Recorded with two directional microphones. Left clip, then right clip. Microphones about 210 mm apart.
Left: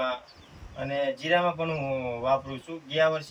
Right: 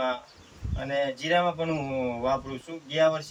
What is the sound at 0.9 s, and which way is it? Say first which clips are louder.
Speech: even; 10° right (ahead or behind).